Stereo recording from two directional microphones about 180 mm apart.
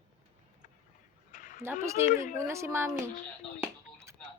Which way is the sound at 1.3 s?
45° left (ahead or behind).